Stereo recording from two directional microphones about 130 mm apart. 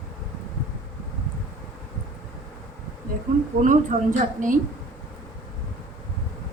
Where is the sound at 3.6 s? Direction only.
75° right (ahead or behind).